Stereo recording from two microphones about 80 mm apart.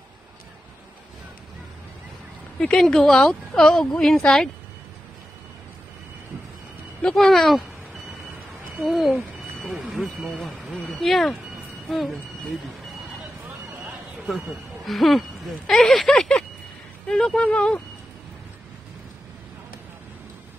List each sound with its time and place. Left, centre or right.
2.6 s a woman's voice: centre
7.0 s speech: centre
8.8 s speech: centre
9.8 s speech: centre
10.3 s speech: centre
14.9 s a woman's voice: centre